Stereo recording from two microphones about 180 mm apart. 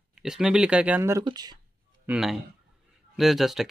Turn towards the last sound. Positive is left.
turn(degrees=0)  # may be behind; listen again after turning